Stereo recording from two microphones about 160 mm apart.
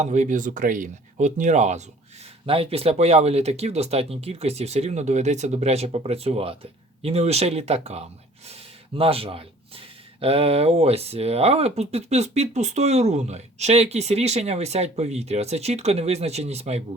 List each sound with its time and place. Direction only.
0.0 s speech: 50° right (ahead or behind)
2.5 s speech: 35° right (ahead or behind)